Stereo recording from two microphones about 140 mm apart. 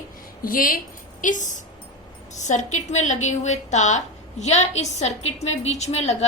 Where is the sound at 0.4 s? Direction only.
85° left.